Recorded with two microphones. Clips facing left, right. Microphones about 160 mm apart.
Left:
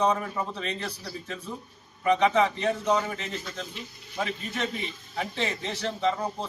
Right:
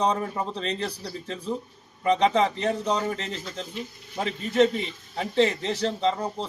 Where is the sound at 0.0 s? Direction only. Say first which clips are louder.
Right 1 dB; 35° right (ahead or behind).